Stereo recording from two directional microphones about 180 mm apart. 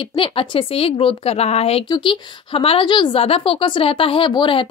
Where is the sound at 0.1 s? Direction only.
30° left (ahead or behind).